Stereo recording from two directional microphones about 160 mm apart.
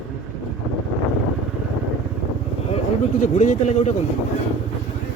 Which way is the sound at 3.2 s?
50° left (ahead or behind).